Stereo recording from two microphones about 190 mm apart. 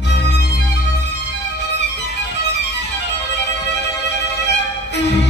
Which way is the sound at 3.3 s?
65° left (ahead or behind).